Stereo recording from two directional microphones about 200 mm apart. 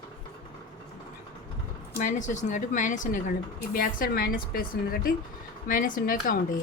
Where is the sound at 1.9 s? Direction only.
40° left (ahead or behind).